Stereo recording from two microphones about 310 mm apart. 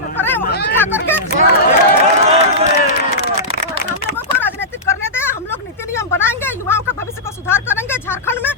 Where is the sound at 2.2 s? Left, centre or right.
Right.